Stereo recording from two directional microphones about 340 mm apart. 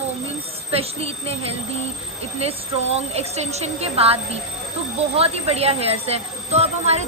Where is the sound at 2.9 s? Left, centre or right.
Centre.